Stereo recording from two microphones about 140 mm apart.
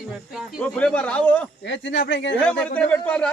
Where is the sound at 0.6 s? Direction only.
5° left (ahead or behind).